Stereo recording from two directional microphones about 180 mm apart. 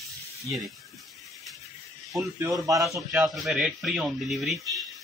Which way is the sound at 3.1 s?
Centre (ahead or behind).